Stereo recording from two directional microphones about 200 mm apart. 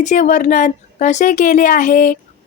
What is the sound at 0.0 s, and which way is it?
A woman's voice, 40° left (ahead or behind).